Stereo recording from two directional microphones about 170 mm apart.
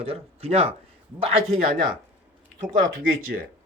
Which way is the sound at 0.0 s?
35° right (ahead or behind).